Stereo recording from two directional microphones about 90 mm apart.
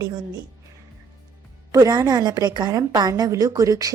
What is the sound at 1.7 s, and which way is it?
A woman's voice, 45° right (ahead or behind).